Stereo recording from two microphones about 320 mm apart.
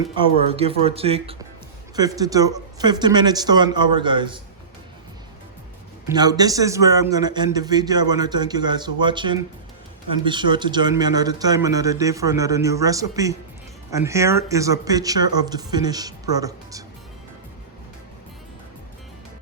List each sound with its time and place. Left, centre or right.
0.2 s a man's voice: centre
6.1 s a man's voice: centre